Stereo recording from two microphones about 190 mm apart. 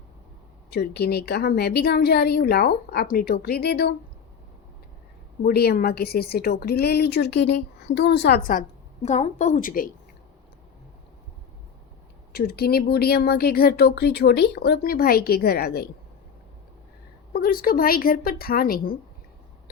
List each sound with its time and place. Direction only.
0.7 s a woman's voice: 55° left (ahead or behind)
5.4 s a woman's voice: 55° left (ahead or behind)
12.3 s a woman's voice: 55° left (ahead or behind)
17.3 s a woman's voice: 50° left (ahead or behind)